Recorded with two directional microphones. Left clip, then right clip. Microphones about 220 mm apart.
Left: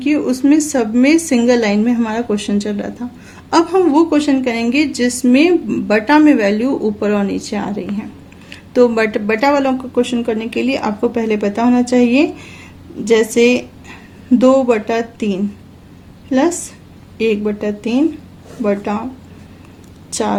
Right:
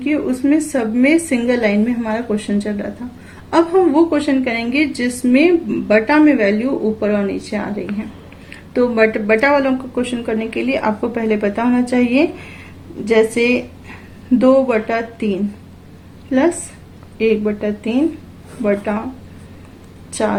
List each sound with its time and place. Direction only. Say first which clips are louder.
0.0 s a woman's voice: left 3 dB; 65° left (ahead or behind)
3.9 s a woman's voice: left 2 dB; 65° left (ahead or behind)
17.2 s a woman's voice: even; 60° left (ahead or behind)